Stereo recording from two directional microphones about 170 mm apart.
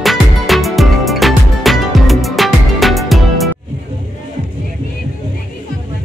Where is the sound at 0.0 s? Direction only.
Centre (ahead or behind).